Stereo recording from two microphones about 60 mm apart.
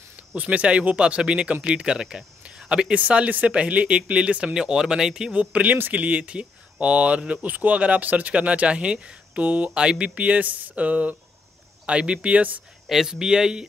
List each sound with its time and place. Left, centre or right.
0.4 s speech: right
12.8 s speech: centre